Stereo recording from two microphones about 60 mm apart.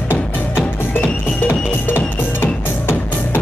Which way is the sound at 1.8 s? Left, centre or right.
Left.